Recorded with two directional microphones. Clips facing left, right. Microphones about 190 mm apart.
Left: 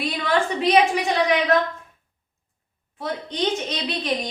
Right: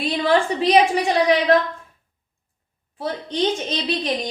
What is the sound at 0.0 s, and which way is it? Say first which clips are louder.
A woman's voice: right 4 dB; 30° right (ahead or behind).